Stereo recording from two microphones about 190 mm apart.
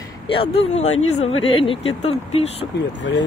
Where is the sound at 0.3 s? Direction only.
30° left (ahead or behind).